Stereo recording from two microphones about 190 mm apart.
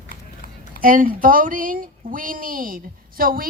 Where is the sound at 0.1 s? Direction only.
45° left (ahead or behind).